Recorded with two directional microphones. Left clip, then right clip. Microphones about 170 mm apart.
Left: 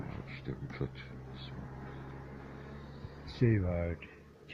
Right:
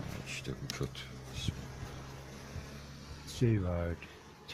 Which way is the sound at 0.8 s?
20° right (ahead or behind).